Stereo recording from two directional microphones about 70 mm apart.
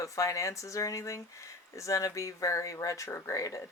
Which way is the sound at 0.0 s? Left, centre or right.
Left.